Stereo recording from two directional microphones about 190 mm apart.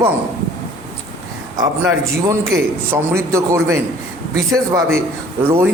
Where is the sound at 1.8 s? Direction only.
15° right (ahead or behind).